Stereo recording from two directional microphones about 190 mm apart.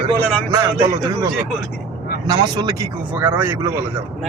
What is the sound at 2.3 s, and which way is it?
Speech, 20° right (ahead or behind).